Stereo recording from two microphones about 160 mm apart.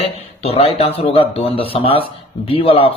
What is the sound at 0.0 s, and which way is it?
A man's voice, 40° left (ahead or behind).